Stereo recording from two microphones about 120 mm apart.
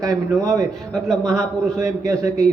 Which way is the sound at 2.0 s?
25° right (ahead or behind).